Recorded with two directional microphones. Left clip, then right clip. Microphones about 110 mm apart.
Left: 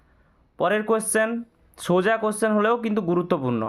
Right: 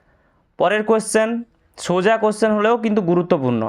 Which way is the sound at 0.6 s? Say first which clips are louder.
Right 5 dB; 40° right (ahead or behind).